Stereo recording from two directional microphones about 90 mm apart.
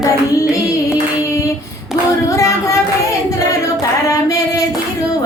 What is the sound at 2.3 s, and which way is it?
Speech, 35° left (ahead or behind).